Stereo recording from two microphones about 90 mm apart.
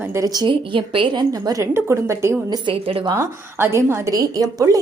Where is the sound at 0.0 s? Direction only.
30° right (ahead or behind).